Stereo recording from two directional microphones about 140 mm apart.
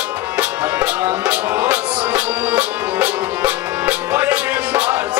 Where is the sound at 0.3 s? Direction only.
10° right (ahead or behind).